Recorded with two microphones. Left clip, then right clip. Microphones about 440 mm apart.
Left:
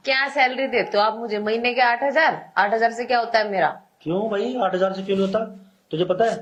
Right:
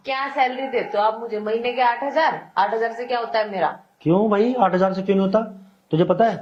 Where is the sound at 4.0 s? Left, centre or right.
Right.